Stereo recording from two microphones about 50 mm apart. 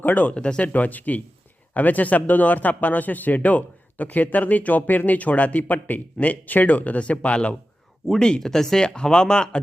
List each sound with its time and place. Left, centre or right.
0.0 s speech: left
0.7 s speech: left
8.2 s speech: centre